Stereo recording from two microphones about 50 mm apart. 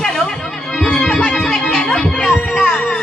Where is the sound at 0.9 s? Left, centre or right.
Left.